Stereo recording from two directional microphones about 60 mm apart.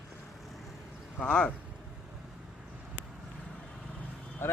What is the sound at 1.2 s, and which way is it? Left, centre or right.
Speech, centre.